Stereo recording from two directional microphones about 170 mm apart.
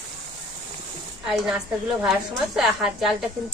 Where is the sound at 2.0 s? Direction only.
5° right (ahead or behind).